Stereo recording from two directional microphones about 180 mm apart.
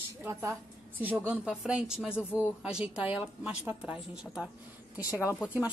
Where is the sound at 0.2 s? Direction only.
15° right (ahead or behind).